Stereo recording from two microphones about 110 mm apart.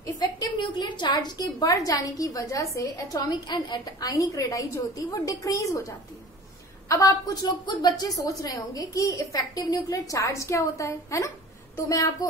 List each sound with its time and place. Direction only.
0.0 s a woman's voice: 40° left (ahead or behind)